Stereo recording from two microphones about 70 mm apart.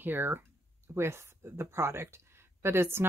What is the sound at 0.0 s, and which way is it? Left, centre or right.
Speech, right.